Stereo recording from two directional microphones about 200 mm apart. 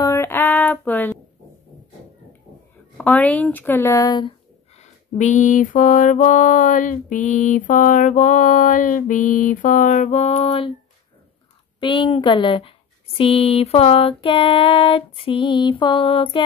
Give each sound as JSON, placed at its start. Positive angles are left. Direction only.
{"t": 0.0, "sound": "a sound", "side_deg": 15}
{"t": 3.0, "sound": "speech", "side_deg": 5}
{"t": 5.1, "sound": "mantra", "side_deg": 35}
{"t": 11.8, "sound": "female singing", "side_deg": 25}